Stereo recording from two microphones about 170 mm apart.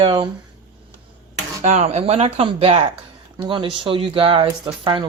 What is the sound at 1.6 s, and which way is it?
Speech, 40° right (ahead or behind).